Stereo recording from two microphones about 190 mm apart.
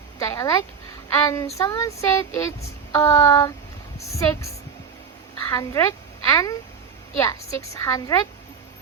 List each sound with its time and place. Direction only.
0.2 s a sound: 20° left (ahead or behind)
1.2 s a woman's voice: 15° left (ahead or behind)
5.5 s a woman's voice: 20° left (ahead or behind)